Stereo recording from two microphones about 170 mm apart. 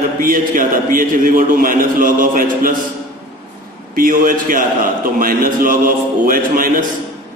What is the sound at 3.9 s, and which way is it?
A man's voice, 55° right (ahead or behind).